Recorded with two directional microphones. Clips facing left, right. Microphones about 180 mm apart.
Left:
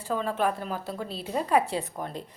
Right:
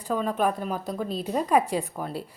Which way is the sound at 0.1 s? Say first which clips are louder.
Right 2 dB; 15° right (ahead or behind).